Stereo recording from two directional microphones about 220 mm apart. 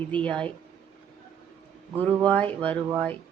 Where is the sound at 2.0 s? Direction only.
5° left (ahead or behind).